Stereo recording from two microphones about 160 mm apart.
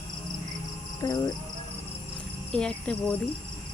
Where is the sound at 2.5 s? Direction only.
5° left (ahead or behind).